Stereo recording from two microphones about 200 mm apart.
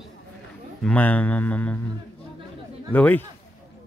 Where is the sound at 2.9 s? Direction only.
5° left (ahead or behind).